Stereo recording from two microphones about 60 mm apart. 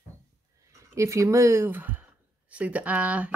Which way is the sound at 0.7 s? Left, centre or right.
Right.